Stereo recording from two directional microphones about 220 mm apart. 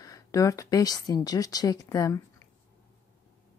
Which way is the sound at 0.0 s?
15° left (ahead or behind).